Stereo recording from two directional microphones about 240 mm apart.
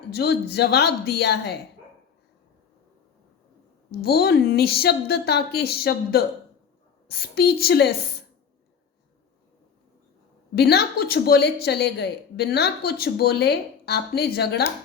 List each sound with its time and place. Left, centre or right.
0.1 s a woman's voice: left
4.0 s speech: left
10.5 s speech: left